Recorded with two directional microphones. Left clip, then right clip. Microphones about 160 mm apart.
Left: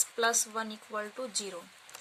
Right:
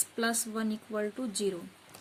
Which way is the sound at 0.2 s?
30° left (ahead or behind).